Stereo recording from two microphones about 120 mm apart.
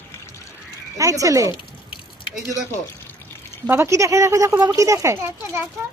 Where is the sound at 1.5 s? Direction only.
45° left (ahead or behind).